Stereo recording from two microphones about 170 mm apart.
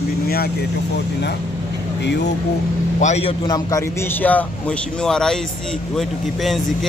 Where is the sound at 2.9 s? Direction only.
40° left (ahead or behind).